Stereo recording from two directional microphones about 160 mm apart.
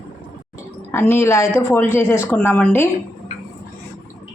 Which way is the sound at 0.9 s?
15° left (ahead or behind).